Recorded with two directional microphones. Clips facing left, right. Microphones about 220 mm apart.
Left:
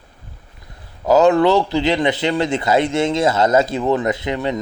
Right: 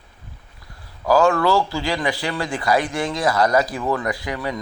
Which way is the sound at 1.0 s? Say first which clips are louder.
Left 4 dB; 20° left (ahead or behind).